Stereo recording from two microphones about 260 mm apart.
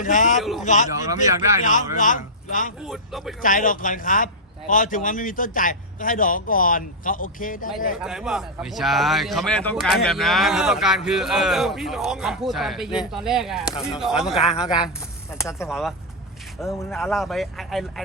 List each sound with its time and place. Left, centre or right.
0.0 s speech: left
0.3 s a man's voice: centre
0.6 s speech: left
2.8 s a man's voice: centre
3.4 s a man's voice: left
8.0 s a man's voice: centre
15.4 s speech: centre
15.7 s a man's voice: centre